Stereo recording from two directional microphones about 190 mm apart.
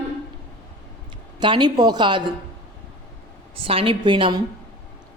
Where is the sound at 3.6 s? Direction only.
30° right (ahead or behind).